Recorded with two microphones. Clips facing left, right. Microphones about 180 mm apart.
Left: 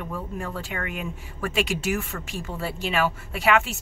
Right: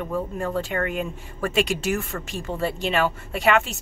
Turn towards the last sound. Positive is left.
turn(degrees=5)  # may be behind; listen again after turning